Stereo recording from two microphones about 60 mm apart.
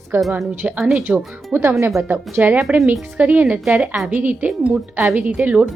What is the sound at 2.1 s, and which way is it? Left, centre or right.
A woman's voice, right.